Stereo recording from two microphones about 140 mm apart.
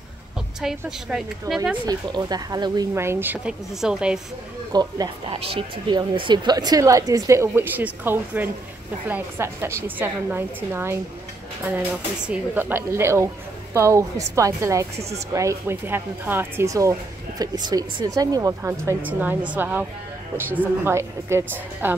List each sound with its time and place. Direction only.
0.6 s a woman's voice: 5° right (ahead or behind)
1.9 s a woman's voice: 30° right (ahead or behind)
2.9 s a woman's voice: 15° right (ahead or behind)
3.8 s a woman's voice: 5° right (ahead or behind)
4.7 s a woman's voice: 30° right (ahead or behind)
5.3 s a woman's voice: 45° right (ahead or behind); by 11.0 s 15° right (ahead or behind)
12.3 s a woman's voice: 15° right (ahead or behind)